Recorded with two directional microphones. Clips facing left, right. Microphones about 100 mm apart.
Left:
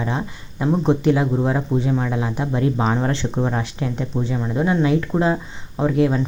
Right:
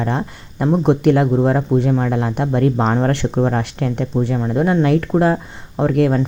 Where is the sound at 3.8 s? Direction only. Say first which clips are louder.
Right 5 dB; 65° right (ahead or behind).